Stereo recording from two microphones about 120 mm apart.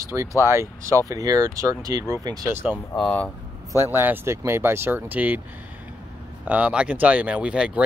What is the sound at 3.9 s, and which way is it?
Speech, 20° right (ahead or behind).